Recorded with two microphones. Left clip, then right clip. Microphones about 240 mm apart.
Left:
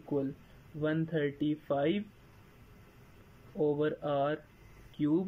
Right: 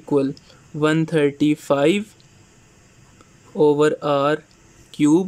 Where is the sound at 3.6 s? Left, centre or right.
Right.